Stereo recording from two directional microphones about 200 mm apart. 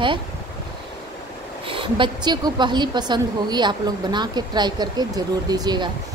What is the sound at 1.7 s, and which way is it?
A woman's voice, 25° right (ahead or behind).